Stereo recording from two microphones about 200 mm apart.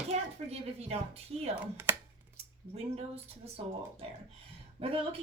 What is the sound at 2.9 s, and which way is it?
A woman's voice, 30° right (ahead or behind).